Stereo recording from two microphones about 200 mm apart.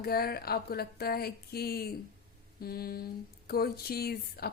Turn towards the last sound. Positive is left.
turn(degrees=50)  # may be behind; listen again after turning